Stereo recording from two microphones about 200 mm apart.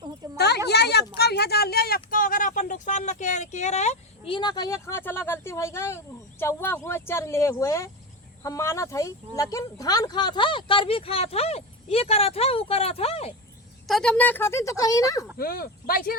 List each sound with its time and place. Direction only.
0.3 s a sound: 55° left (ahead or behind)
0.7 s speech: 55° left (ahead or behind); by 4.4 s 35° left (ahead or behind)
4.4 s speech: 20° left (ahead or behind)
13.8 s speech: centre (ahead or behind)
15.4 s speech: 50° left (ahead or behind)